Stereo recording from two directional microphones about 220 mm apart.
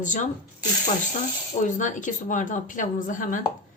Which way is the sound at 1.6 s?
35° left (ahead or behind).